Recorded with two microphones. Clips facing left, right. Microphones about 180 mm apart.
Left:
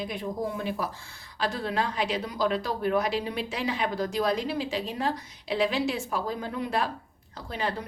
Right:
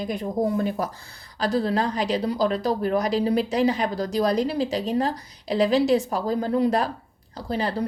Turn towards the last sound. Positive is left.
turn(degrees=-35)  # may be behind; listen again after turning